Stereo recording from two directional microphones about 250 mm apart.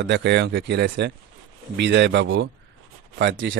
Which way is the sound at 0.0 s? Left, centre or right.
Right.